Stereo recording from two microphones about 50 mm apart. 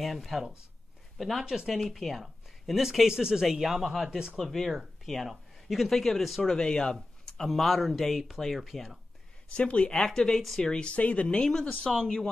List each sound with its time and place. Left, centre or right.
0.0 s speech: centre
1.4 s speech: centre
1.7 s a man's voice: centre
6.4 s speech: centre
7.4 s speech: centre
9.6 s speech: left
11.4 s speech: centre